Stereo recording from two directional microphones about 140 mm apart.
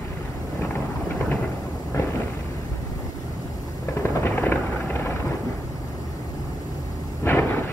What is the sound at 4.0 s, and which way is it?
Helicopter, 15° left (ahead or behind).